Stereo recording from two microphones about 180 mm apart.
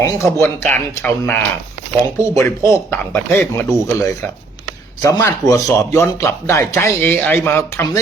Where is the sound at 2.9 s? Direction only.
10° left (ahead or behind).